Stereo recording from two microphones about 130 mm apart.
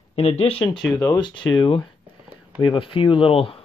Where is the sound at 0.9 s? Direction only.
30° left (ahead or behind).